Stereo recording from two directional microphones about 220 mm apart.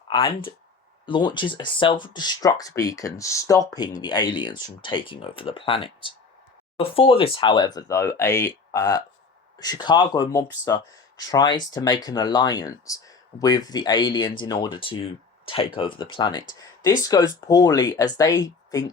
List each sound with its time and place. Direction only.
1.0 s speech: 20° left (ahead or behind)